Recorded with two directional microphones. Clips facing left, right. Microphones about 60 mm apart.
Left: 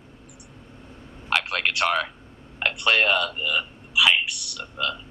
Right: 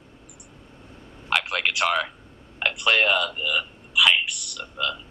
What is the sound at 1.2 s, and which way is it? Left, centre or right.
A man's voice, centre.